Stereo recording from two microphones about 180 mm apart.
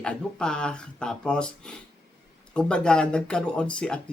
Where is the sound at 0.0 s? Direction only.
5° left (ahead or behind).